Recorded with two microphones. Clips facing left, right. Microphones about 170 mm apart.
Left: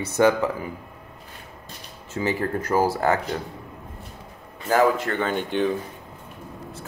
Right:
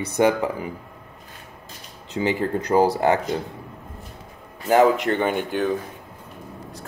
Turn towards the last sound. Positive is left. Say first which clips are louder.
# right 3 dB
turn(degrees=-15)  # may be behind; listen again after turning